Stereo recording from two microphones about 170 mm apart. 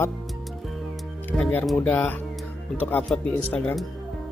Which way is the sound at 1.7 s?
10° left (ahead or behind).